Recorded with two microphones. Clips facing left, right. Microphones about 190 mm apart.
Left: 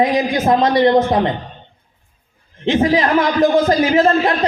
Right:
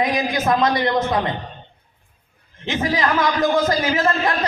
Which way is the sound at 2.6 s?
30° left (ahead or behind).